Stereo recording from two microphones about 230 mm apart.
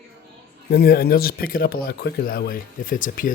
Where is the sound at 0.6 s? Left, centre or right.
Left.